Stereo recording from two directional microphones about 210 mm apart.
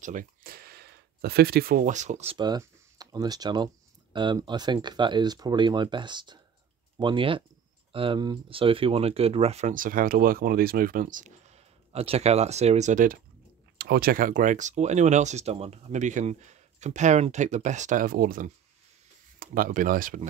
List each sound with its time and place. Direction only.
0.0 s speech: 40° right (ahead or behind)
2.3 s speech: 20° right (ahead or behind); by 20.2 s 40° right (ahead or behind)